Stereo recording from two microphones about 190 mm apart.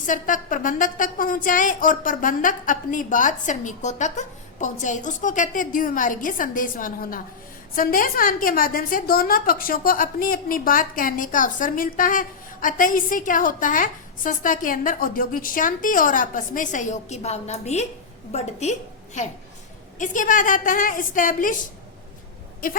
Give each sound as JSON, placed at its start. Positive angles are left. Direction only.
{"t": 0.0, "sound": "a woman's voice", "side_deg": 45}